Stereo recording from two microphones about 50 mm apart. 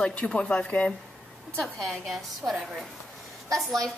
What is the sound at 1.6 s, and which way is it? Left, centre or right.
Speech, centre.